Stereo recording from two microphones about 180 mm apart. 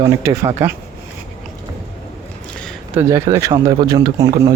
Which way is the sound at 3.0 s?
20° right (ahead or behind).